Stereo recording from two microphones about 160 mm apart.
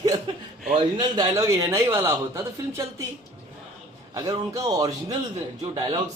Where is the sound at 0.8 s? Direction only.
25° right (ahead or behind).